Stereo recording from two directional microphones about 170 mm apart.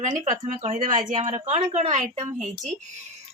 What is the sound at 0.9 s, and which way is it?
Speech, 50° right (ahead or behind).